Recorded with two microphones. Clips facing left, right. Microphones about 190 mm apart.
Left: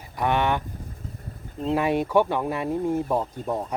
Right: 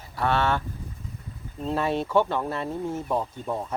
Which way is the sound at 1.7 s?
15° left (ahead or behind).